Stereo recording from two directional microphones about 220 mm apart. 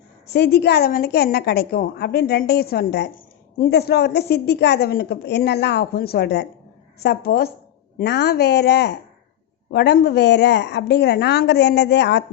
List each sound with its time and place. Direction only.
0.3 s a woman's voice: 50° left (ahead or behind)